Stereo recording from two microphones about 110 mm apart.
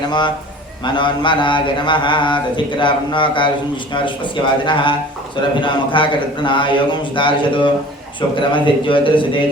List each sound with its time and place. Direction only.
0.9 s mantra: 45° left (ahead or behind)